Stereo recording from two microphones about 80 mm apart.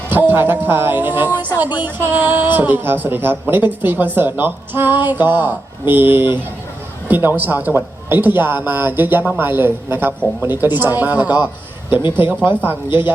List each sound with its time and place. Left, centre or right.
0.1 s a woman's voice: right
12.6 s a woman's voice: right